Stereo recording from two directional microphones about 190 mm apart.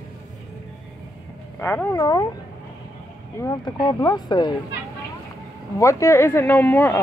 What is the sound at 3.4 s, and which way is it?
Speech, 20° left (ahead or behind).